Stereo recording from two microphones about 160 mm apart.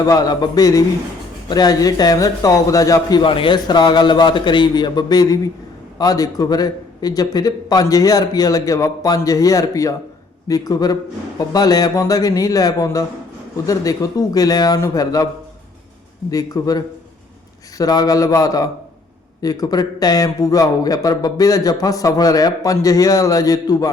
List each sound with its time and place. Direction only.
0.0 s a man's voice: 25° left (ahead or behind)
16.3 s a man's voice: 25° left (ahead or behind)